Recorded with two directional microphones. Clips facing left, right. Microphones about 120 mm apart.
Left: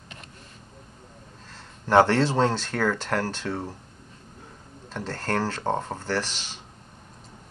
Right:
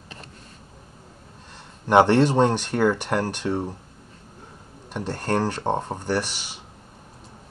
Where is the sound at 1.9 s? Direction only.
15° right (ahead or behind).